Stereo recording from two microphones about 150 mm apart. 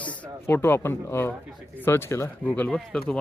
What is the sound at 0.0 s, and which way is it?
Speech, 10° left (ahead or behind).